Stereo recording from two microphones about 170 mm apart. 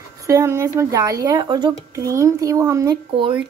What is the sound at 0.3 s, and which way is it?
Speech, 15° right (ahead or behind).